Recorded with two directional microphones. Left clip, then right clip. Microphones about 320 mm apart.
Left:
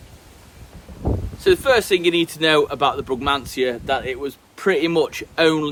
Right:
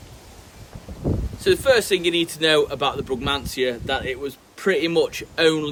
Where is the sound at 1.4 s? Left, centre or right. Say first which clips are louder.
Left 2 dB; centre.